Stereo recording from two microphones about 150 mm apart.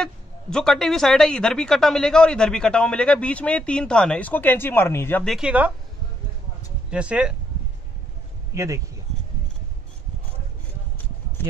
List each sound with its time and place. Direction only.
0.0 s speech: 5° left (ahead or behind)
5.2 s speech: 5° right (ahead or behind)
6.9 s speech: 5° right (ahead or behind)
8.5 s speech: 20° right (ahead or behind)